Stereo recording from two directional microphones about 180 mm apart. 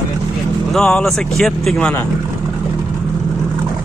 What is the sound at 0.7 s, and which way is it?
Speech, 5° left (ahead or behind).